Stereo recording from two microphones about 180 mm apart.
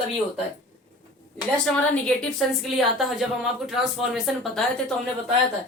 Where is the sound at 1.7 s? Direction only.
5° left (ahead or behind).